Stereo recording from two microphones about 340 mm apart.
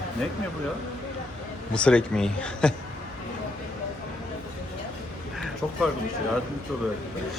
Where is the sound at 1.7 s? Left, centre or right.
Centre.